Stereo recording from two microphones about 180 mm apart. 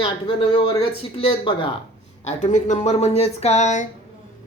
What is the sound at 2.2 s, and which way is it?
Speech, 40° left (ahead or behind).